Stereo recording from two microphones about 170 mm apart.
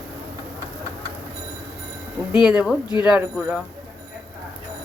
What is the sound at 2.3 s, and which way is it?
Speech, 5° right (ahead or behind).